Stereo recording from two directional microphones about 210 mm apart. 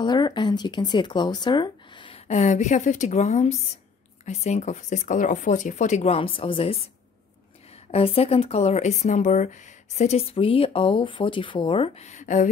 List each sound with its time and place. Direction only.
0.0 s speech: 20° left (ahead or behind)
7.9 s speech: 30° left (ahead or behind)